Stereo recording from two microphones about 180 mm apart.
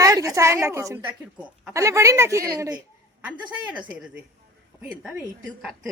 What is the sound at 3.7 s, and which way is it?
Speech, 5° right (ahead or behind).